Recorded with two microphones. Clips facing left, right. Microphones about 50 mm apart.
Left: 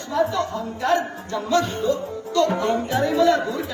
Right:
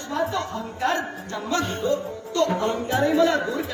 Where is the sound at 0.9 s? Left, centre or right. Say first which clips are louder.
Left 4 dB; right.